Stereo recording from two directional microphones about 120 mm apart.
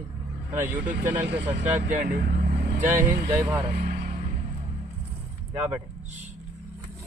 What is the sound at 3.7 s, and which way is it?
Vehicle, 90° right.